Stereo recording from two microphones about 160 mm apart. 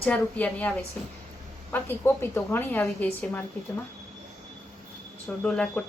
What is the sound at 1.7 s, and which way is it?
A woman's voice, 15° left (ahead or behind).